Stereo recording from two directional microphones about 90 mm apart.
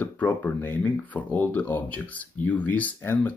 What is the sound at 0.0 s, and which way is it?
Speech, 20° left (ahead or behind).